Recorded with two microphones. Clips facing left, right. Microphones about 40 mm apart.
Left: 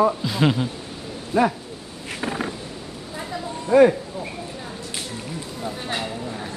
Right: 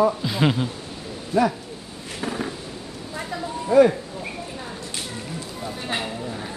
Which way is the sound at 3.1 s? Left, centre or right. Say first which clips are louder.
Right 1 dB; centre.